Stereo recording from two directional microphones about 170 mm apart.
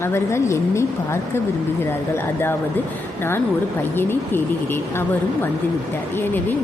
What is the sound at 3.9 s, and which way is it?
Speech, 10° left (ahead or behind).